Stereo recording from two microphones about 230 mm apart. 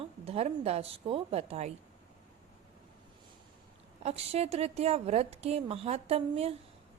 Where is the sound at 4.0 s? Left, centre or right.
Right.